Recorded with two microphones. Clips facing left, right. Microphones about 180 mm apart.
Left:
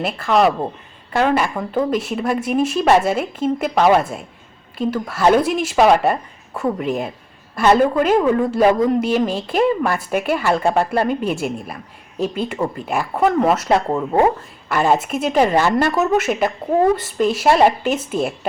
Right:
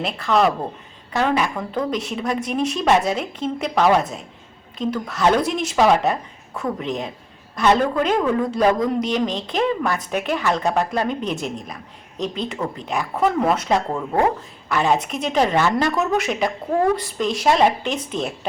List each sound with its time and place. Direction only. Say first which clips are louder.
0.0 s a woman's voice: left 3 dB; 5° left (ahead or behind)
3.8 s a woman's voice: left 2 dB; 20° left (ahead or behind)
4.8 s a woman's voice: left 3 dB; 5° left (ahead or behind)
13.9 s a woman's voice: left 4 dB; 20° left (ahead or behind)
14.7 s a woman's voice: left 3 dB; 5° left (ahead or behind)